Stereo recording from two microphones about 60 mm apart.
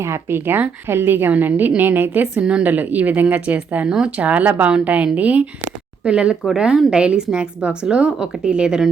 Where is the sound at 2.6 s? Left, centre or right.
Right.